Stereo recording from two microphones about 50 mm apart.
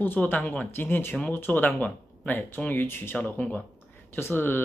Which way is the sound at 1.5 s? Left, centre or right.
Left.